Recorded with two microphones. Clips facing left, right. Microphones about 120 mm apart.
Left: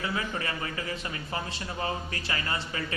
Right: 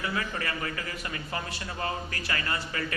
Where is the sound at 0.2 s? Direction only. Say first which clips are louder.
Even; 25° left (ahead or behind).